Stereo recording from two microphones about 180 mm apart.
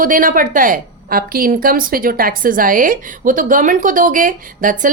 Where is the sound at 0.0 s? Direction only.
50° right (ahead or behind).